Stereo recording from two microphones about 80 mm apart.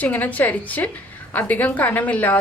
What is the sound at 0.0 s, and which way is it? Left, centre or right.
Speech, centre.